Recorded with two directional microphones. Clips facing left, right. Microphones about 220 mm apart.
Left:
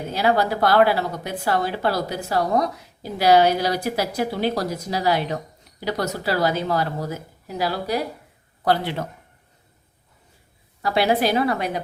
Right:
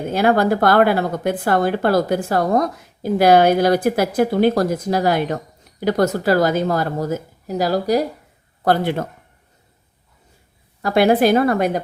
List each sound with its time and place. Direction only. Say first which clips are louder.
0.1 s a woman's voice: right 5 dB; 50° right (ahead or behind)
10.8 s a woman's voice: right 6 dB; 50° right (ahead or behind)